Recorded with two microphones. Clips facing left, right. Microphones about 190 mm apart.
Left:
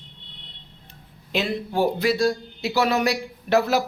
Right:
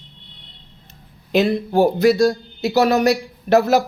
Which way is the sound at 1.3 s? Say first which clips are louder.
Right 8 dB; 45° right (ahead or behind).